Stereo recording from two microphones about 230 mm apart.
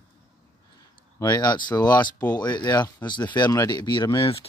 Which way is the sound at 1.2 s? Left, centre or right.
Centre.